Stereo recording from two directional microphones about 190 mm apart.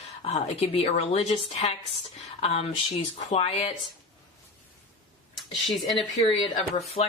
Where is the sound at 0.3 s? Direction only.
35° left (ahead or behind).